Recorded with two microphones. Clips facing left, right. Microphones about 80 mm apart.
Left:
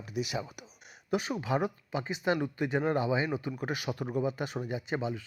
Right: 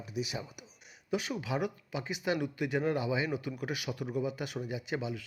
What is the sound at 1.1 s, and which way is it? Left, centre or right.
A man's voice, left.